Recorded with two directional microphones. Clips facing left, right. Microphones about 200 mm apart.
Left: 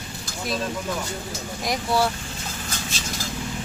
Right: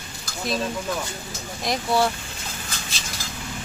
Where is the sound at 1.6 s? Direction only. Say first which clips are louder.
Right 1 dB; 10° left (ahead or behind).